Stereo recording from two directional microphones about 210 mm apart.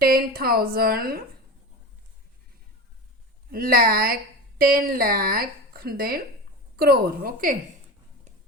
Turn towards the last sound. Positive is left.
turn(degrees=-45)  # may be behind; listen again after turning